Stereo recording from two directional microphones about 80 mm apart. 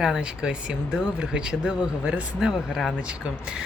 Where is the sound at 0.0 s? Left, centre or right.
Centre.